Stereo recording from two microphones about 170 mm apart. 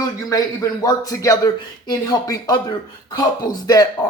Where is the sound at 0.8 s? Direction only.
20° left (ahead or behind).